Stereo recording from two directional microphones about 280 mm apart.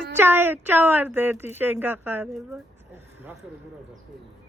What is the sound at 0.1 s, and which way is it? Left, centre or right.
Speech, centre.